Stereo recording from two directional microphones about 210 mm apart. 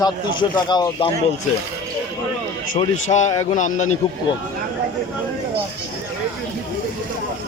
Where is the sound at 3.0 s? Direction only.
35° left (ahead or behind).